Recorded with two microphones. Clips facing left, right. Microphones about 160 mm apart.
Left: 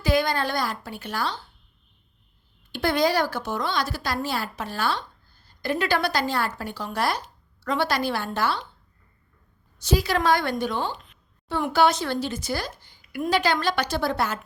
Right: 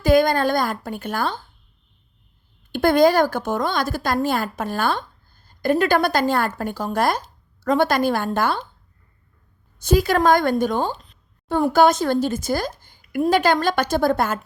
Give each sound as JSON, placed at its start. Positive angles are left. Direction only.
{"t": 0.0, "sound": "a woman's voice", "side_deg": -50}
{"t": 2.7, "sound": "a woman's voice", "side_deg": -50}
{"t": 9.7, "sound": "a woman's voice", "side_deg": -50}